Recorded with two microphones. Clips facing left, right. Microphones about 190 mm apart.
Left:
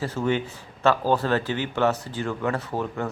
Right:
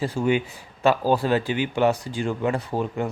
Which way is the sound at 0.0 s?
15° right (ahead or behind).